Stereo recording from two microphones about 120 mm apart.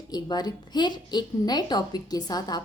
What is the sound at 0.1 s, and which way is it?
A woman's voice, 35° left (ahead or behind).